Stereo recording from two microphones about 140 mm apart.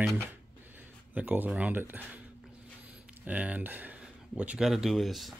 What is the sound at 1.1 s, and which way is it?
Speech, 10° right (ahead or behind).